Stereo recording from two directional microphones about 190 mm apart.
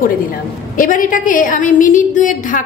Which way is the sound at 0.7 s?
45° left (ahead or behind).